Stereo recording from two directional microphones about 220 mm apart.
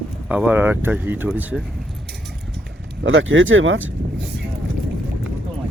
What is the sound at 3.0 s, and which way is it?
Speech, 60° right (ahead or behind).